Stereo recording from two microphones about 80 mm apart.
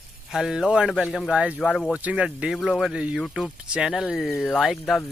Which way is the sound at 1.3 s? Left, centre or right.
Centre.